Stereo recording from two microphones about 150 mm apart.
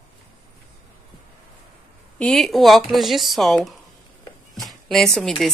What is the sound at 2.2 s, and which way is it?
Speech, centre (ahead or behind).